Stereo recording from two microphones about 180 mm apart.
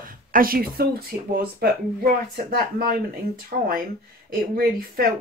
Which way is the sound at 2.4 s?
55° right (ahead or behind).